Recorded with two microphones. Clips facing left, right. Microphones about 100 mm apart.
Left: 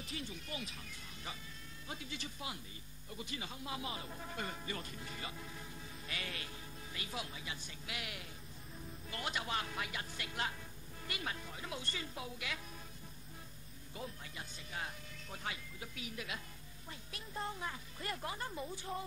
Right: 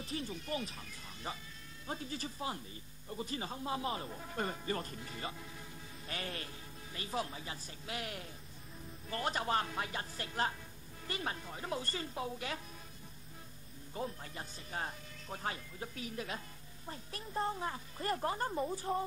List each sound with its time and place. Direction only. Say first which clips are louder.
0.0 s speech: right 5 dB; 35° right (ahead or behind)
13.9 s speech: right 6 dB; 40° right (ahead or behind)